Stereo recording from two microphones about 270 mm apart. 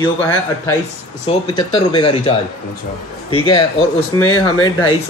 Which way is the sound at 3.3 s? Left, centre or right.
Centre.